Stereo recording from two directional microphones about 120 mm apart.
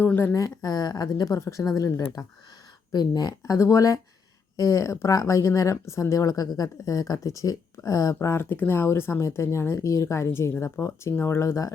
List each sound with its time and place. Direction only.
0.0 s speech: 15° left (ahead or behind)
0.3 s speech: 30° left (ahead or behind)